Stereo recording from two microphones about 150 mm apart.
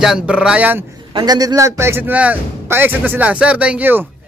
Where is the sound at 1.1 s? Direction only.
25° right (ahead or behind).